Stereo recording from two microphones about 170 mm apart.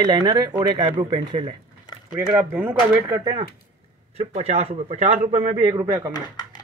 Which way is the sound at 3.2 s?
25° right (ahead or behind).